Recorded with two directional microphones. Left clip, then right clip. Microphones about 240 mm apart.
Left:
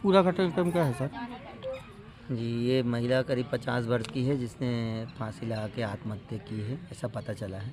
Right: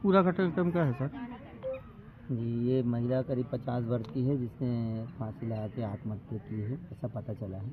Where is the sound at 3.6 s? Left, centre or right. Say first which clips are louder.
Left 6 dB; left.